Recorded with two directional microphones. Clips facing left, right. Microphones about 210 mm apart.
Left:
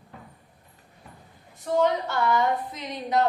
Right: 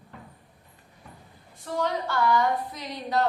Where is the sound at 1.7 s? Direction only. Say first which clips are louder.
Left 5 dB; 20° left (ahead or behind).